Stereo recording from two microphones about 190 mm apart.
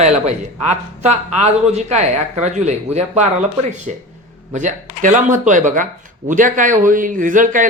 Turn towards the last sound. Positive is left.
turn(degrees=-45)  # may be behind; listen again after turning